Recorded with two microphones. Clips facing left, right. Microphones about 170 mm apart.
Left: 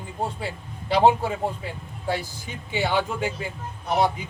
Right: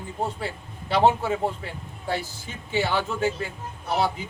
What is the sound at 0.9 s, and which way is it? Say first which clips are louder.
A man's voice: left 1 dB; 15° left (ahead or behind).